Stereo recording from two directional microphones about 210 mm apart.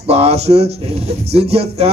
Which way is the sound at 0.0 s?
30° right (ahead or behind).